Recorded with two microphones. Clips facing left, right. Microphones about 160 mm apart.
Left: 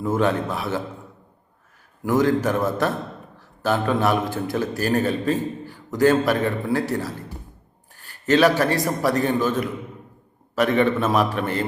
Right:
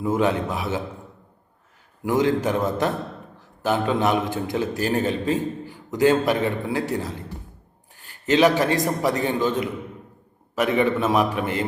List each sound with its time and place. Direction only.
0.0 s a man's voice: 15° right (ahead or behind)
2.0 s a man's voice: 20° right (ahead or behind)